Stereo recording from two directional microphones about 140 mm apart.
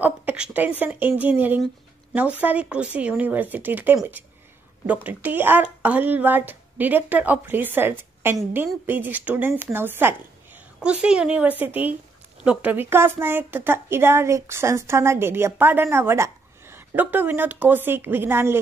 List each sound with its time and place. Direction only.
0.0 s a woman's voice: 10° right (ahead or behind)